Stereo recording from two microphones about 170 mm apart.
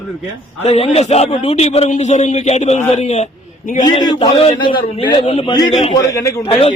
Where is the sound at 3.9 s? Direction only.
25° left (ahead or behind).